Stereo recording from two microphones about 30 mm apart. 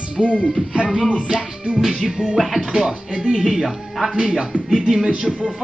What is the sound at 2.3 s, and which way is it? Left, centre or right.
Music, centre.